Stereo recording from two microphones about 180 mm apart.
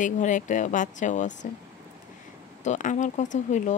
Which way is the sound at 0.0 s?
45° left (ahead or behind).